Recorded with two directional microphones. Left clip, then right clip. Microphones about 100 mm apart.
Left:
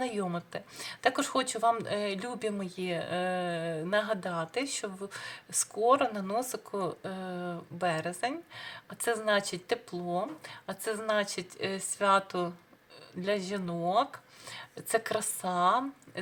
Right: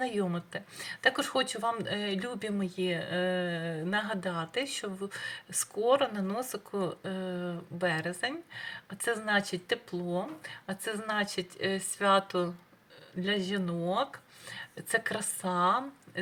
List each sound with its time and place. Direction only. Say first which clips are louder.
0.0 s speech: right 1 dB; 20° left (ahead or behind)